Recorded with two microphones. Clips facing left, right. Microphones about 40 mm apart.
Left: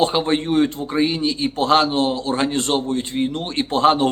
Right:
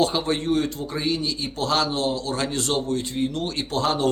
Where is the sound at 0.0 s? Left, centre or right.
Left.